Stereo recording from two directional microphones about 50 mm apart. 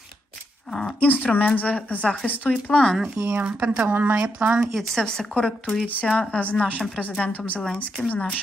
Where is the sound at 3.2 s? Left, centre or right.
Right.